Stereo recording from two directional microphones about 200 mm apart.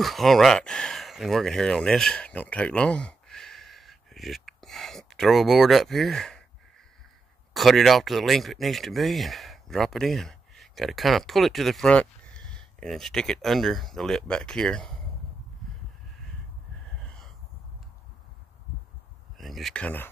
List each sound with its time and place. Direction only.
0.0 s speech: centre (ahead or behind)
7.5 s speech: centre (ahead or behind)
17.0 s a sound: 5° left (ahead or behind)
19.3 s speech: centre (ahead or behind)